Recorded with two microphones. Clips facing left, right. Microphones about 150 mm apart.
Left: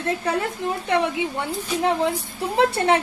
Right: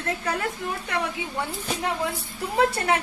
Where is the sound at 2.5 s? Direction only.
25° left (ahead or behind).